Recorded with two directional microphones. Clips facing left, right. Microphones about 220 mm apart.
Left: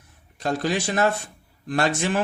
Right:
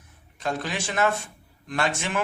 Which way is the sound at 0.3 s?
35° left (ahead or behind).